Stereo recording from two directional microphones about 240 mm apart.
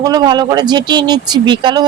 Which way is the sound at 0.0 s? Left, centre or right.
Centre.